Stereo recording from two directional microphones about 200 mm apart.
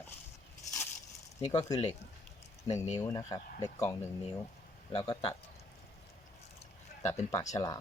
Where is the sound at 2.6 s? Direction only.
35° left (ahead or behind).